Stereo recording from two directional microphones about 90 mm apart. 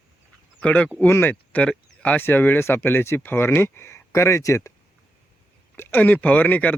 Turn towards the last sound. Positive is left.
turn(degrees=15)  # may be behind; listen again after turning